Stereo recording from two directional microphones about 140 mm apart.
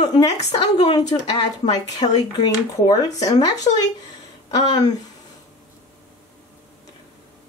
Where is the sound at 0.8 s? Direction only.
30° left (ahead or behind).